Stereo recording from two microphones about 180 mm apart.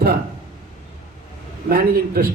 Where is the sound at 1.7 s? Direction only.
55° right (ahead or behind).